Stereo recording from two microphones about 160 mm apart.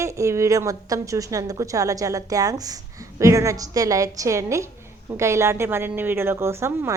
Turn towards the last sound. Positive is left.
turn(degrees=-15)  # may be behind; listen again after turning